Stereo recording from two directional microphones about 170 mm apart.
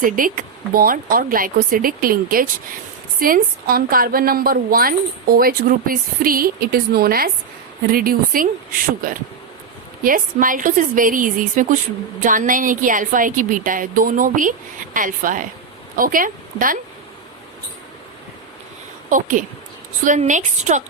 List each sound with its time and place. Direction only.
0.0 s a woman's voice: 55° right (ahead or behind)
10.0 s a woman's voice: 55° right (ahead or behind)
19.1 s a woman's voice: 50° right (ahead or behind)